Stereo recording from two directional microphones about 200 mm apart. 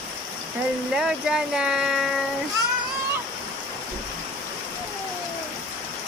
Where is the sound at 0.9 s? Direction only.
5° right (ahead or behind).